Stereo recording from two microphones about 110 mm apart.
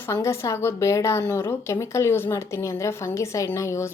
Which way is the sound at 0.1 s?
25° left (ahead or behind).